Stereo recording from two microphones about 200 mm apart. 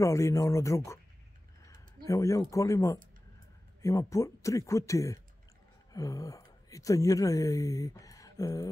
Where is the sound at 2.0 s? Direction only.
15° left (ahead or behind).